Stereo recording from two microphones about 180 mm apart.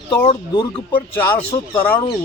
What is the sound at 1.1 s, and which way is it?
Speech, 10° left (ahead or behind).